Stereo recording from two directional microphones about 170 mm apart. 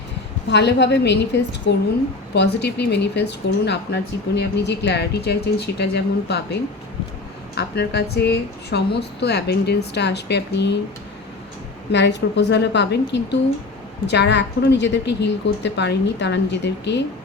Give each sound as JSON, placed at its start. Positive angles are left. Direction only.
{"t": 0.5, "sound": "a woman's voice", "side_deg": 80}
{"t": 11.9, "sound": "a woman's voice", "side_deg": 90}